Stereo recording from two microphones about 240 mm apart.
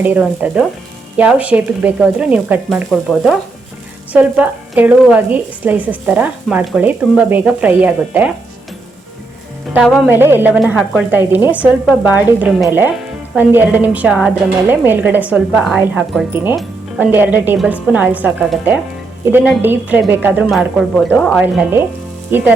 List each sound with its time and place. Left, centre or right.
0.0 s a woman's voice: centre
10.1 s a woman's voice: centre
21.4 s speech: centre